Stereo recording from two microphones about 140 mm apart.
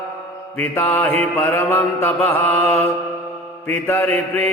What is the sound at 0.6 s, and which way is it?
Mantra, 15° left (ahead or behind).